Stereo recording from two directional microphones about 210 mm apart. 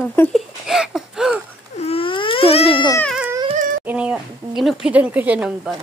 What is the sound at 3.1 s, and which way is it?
Music, 5° right (ahead or behind).